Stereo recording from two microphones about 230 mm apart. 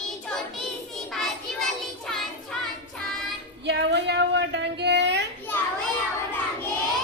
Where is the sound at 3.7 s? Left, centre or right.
Right.